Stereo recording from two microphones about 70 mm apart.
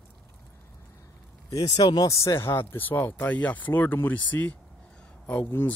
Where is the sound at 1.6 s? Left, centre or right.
Left.